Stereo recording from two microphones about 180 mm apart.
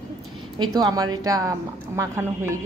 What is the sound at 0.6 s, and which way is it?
A woman's voice, 20° right (ahead or behind).